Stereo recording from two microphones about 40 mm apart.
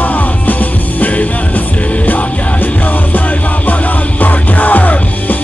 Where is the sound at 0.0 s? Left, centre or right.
Left.